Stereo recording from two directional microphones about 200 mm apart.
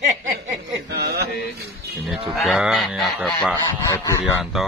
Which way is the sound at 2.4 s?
Centre (ahead or behind).